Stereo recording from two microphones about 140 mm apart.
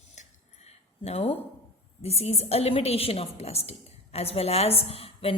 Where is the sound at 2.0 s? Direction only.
45° left (ahead or behind).